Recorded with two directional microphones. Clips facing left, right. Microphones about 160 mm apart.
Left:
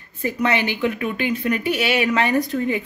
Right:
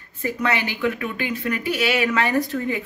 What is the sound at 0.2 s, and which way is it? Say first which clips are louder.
Speech: left 3 dB; 20° left (ahead or behind).